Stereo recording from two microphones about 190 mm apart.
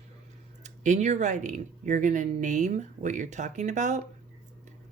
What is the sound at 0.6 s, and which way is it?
Speech, 40° right (ahead or behind).